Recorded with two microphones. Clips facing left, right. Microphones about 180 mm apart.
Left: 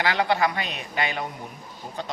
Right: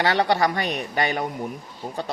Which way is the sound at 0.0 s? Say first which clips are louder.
Right 2 dB; 35° right (ahead or behind).